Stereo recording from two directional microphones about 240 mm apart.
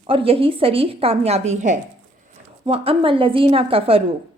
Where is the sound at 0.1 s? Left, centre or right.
Right.